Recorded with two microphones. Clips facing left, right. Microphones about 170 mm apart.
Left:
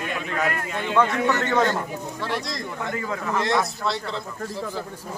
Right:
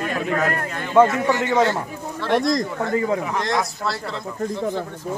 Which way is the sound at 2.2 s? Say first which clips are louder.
Right 12 dB; 55° right (ahead or behind).